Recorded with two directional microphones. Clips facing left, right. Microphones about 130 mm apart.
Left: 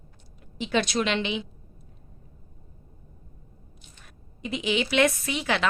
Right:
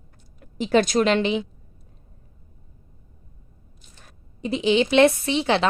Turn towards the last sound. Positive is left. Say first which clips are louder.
# right 6 dB
turn(degrees=-30)  # may be behind; listen again after turning